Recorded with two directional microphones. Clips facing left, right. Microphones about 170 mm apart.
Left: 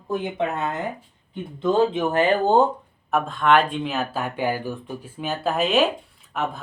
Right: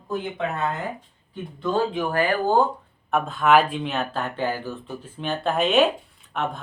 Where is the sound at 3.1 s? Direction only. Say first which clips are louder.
Even; centre (ahead or behind).